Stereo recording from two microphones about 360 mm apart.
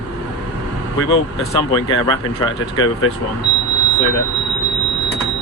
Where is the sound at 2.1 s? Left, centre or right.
Centre.